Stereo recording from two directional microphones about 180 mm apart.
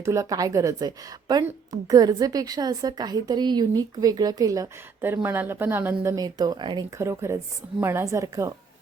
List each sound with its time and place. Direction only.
0.0 s a woman's voice: 15° right (ahead or behind)